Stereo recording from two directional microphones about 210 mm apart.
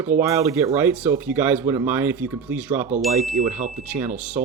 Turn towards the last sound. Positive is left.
turn(degrees=-5)  # may be behind; listen again after turning